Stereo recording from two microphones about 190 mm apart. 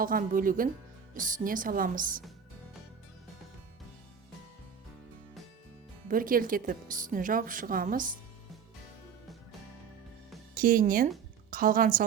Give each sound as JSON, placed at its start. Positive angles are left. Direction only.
{"t": 0.0, "sound": "a woman's voice", "side_deg": -45}
{"t": 6.1, "sound": "a woman's voice", "side_deg": -45}
{"t": 10.5, "sound": "a woman's voice", "side_deg": -50}